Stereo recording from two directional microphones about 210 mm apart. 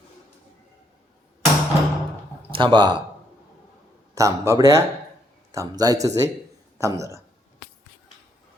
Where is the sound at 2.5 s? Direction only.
20° right (ahead or behind).